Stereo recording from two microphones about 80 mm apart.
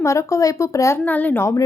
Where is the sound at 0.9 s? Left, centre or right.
Left.